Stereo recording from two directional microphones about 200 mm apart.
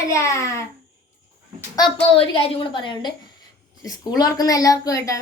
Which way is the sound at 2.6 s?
25° left (ahead or behind).